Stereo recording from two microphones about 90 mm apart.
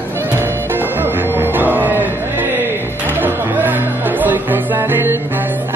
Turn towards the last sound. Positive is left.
turn(degrees=-25)  # may be behind; listen again after turning